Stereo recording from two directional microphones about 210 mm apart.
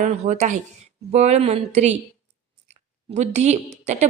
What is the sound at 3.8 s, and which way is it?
Speech, 30° right (ahead or behind).